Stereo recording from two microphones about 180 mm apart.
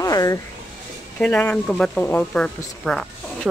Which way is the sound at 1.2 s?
10° left (ahead or behind).